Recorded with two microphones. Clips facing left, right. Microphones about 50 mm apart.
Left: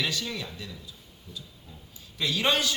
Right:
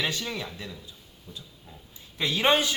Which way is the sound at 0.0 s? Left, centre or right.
Right.